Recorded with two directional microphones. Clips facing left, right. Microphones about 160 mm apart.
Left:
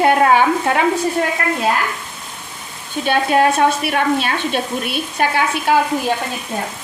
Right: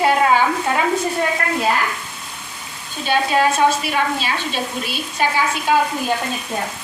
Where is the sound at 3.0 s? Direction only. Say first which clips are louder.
Left 2 dB; 55° left (ahead or behind).